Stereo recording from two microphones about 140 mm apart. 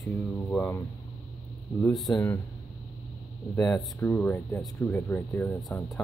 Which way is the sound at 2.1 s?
15° left (ahead or behind).